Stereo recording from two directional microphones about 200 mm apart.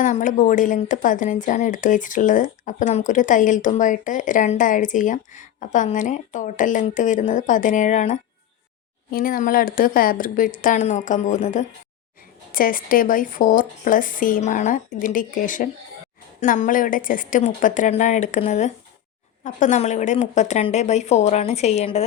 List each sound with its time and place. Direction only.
0.0 s speech: 40° left (ahead or behind)